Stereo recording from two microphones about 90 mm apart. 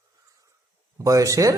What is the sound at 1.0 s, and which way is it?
Speech, 40° right (ahead or behind).